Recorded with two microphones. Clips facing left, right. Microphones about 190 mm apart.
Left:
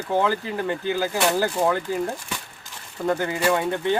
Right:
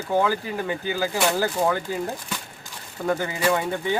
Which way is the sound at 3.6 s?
10° right (ahead or behind).